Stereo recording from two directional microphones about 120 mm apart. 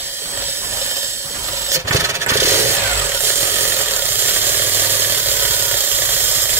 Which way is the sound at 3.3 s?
20° right (ahead or behind).